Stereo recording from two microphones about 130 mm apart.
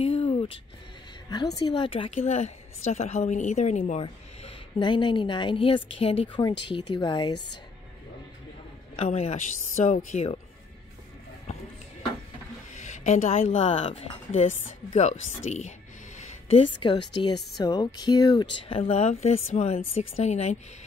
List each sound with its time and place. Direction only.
0.0 s a sound: 50° left (ahead or behind)
1.3 s a woman's voice: 30° left (ahead or behind); by 4.0 s 75° left (ahead or behind)
4.0 s a woman's voice: 45° left (ahead or behind)
8.9 s a woman's voice: 55° left (ahead or behind)
12.7 s a woman's voice: 65° left (ahead or behind)
16.2 s a sound: 50° left (ahead or behind)
16.8 s speech: 40° left (ahead or behind); by 20.5 s 55° left (ahead or behind)